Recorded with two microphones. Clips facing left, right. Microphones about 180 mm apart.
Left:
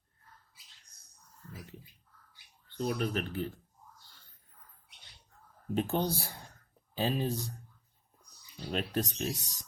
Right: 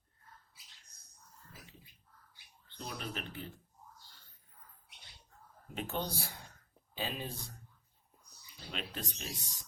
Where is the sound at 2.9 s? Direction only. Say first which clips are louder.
Left 9 dB; 50° left (ahead or behind).